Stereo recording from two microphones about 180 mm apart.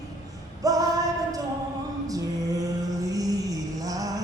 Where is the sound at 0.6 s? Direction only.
20° right (ahead or behind).